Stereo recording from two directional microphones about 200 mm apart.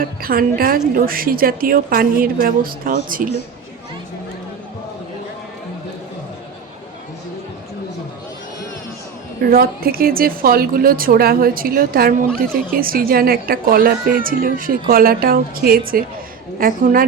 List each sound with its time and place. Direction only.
0.0 s speech: 45° right (ahead or behind)
9.4 s speech: 50° right (ahead or behind)